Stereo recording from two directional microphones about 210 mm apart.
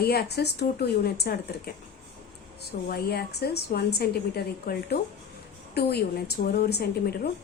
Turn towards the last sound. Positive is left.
turn(degrees=50)  # may be behind; listen again after turning